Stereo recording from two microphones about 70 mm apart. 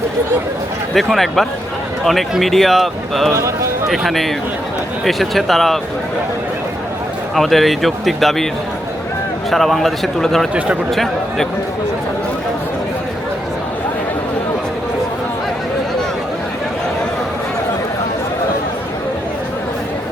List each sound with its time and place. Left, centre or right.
0.9 s speech: centre
3.3 s a man's voice: right
3.8 s speech: centre
7.3 s speech: centre
9.5 s speech: centre